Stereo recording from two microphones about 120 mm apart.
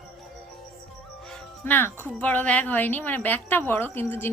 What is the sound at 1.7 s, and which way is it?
A woman's voice, 15° left (ahead or behind).